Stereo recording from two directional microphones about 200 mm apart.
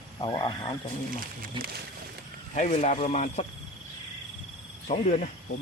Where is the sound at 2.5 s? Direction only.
35° left (ahead or behind).